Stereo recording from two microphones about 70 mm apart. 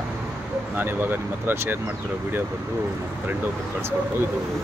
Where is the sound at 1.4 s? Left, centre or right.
Right.